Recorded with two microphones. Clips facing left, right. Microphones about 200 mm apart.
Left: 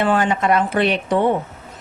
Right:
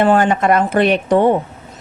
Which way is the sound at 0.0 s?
45° right (ahead or behind).